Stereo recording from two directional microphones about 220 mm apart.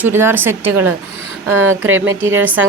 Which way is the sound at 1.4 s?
65° right (ahead or behind).